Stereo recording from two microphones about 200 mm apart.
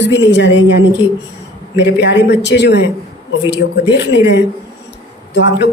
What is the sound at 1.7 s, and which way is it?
A woman's voice, 60° left (ahead or behind).